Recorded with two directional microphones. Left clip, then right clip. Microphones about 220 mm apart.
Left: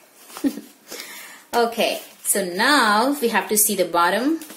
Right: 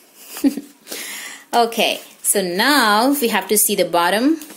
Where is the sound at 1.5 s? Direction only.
40° right (ahead or behind).